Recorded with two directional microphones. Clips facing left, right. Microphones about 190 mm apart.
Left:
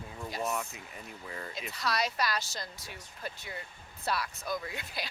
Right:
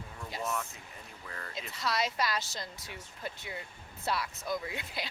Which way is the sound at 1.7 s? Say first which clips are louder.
Even; 25° right (ahead or behind).